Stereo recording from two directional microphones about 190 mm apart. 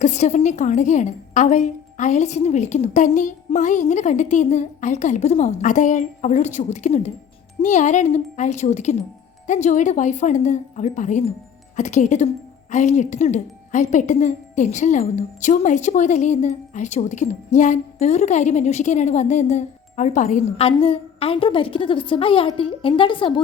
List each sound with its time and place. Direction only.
0.0 s speech: 40° left (ahead or behind)